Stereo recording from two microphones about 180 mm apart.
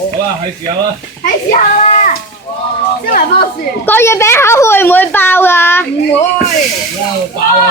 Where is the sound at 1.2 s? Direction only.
50° left (ahead or behind).